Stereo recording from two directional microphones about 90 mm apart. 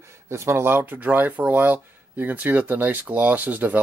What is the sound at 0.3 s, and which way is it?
Speech, 30° right (ahead or behind).